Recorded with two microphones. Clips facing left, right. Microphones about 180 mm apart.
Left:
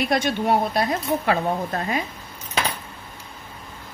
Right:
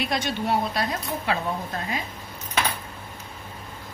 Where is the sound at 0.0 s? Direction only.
55° left (ahead or behind).